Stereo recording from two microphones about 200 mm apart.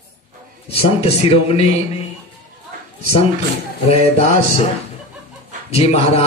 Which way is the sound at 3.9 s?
30° left (ahead or behind).